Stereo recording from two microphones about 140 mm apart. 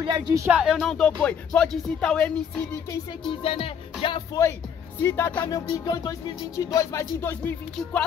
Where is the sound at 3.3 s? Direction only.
40° left (ahead or behind).